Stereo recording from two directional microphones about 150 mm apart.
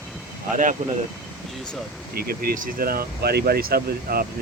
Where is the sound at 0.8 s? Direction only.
50° right (ahead or behind).